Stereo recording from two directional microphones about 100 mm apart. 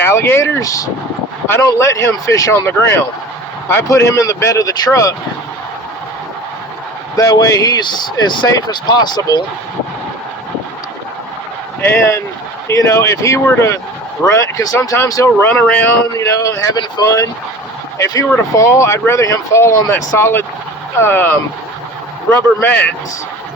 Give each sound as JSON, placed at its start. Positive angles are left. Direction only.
{"t": 0.0, "sound": "speech", "side_deg": 25}
{"t": 7.2, "sound": "speech", "side_deg": 35}
{"t": 8.4, "sound": "speech", "side_deg": 35}
{"t": 8.7, "sound": "speech", "side_deg": 45}
{"t": 11.8, "sound": "speech", "side_deg": 25}
{"t": 15.4, "sound": "speech", "side_deg": 20}
{"t": 16.1, "sound": "speech", "side_deg": 35}